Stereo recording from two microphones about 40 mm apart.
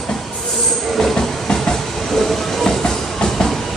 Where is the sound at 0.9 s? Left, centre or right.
Centre.